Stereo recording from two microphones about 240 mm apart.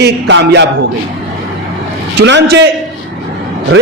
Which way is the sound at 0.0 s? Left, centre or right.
Right.